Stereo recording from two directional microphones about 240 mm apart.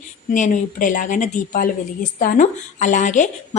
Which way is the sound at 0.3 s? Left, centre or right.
Left.